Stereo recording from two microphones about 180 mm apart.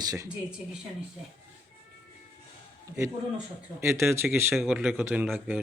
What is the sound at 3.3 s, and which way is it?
Speech, 15° right (ahead or behind).